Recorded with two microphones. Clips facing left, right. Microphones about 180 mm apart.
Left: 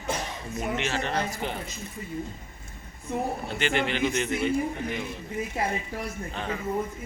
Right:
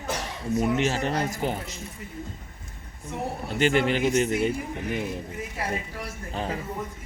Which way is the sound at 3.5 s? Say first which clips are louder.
Right 6 dB; 40° right (ahead or behind).